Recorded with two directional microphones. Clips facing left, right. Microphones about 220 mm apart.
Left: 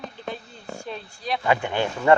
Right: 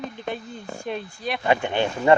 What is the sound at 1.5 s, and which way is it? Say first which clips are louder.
Speech: right 2 dB; 20° right (ahead or behind).